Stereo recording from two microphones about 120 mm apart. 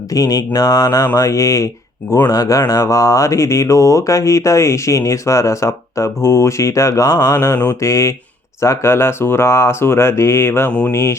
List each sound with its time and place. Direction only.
0.1 s speech: 30° left (ahead or behind)
10.7 s mantra: 10° left (ahead or behind)
10.9 s speech: 25° left (ahead or behind)